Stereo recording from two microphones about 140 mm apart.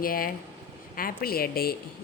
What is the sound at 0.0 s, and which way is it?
A woman's voice, 90° left.